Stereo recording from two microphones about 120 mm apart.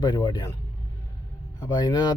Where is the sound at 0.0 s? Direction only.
35° left (ahead or behind).